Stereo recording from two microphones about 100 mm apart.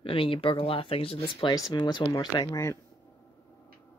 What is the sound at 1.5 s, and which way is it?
Speech, 45° left (ahead or behind).